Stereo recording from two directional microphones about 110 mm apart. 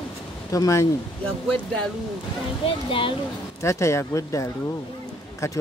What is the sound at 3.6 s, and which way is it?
A man's voice, 25° left (ahead or behind).